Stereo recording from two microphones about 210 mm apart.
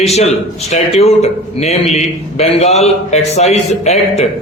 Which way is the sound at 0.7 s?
30° left (ahead or behind).